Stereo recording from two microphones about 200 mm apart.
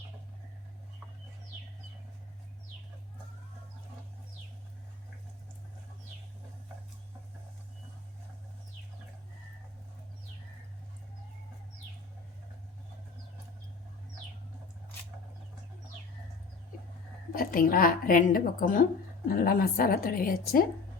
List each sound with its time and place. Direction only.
17.3 s a woman's voice: 45° left (ahead or behind)